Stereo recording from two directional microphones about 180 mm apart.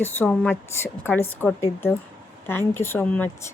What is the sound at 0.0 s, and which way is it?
Speech, 10° left (ahead or behind).